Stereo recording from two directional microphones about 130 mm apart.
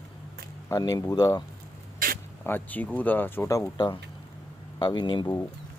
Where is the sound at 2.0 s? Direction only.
90° right.